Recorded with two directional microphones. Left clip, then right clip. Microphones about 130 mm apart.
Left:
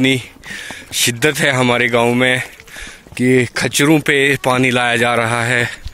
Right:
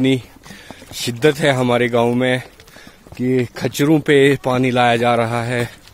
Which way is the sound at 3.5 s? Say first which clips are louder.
Left 3 dB; 5° right (ahead or behind).